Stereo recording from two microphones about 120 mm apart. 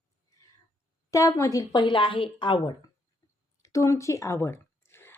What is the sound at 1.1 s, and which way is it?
A woman's voice, 25° left (ahead or behind).